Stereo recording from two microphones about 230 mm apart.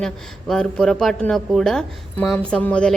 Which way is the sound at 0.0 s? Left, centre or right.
Centre.